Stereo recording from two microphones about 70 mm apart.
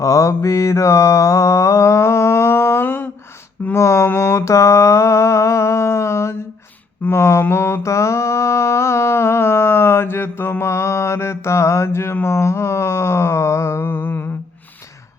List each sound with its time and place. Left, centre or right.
0.0 s mantra: left
3.8 s mantra: left
12.2 s a sound: left